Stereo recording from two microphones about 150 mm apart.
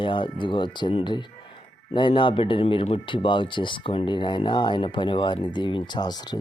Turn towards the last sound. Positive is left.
turn(degrees=25)  # may be behind; listen again after turning